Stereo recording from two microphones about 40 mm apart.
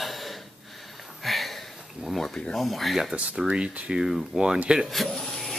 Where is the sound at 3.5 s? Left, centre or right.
Right.